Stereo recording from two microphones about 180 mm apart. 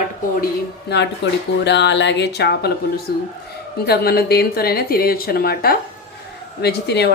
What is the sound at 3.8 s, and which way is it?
A woman's voice, 60° left (ahead or behind).